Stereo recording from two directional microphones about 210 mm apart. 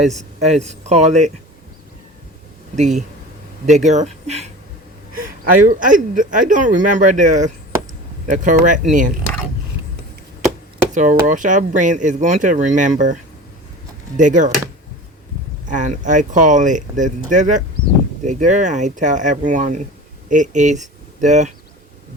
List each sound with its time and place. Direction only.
0.2 s speech: 35° right (ahead or behind)
2.7 s speech: 35° right (ahead or behind)
10.9 s speech: 35° right (ahead or behind)
14.2 s speech: 35° right (ahead or behind)
15.7 s speech: 35° right (ahead or behind)